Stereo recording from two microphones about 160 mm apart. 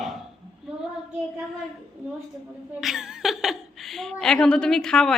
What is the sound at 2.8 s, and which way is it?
Laughter, centre (ahead or behind).